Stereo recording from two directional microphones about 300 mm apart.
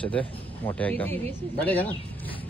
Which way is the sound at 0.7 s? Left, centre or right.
Centre.